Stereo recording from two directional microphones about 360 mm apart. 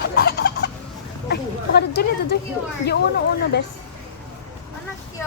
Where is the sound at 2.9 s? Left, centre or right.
Left.